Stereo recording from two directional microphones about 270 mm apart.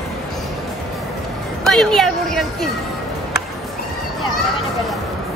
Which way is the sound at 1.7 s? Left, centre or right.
Centre.